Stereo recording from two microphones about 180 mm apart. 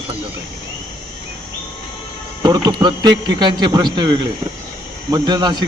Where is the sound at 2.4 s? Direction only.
25° right (ahead or behind).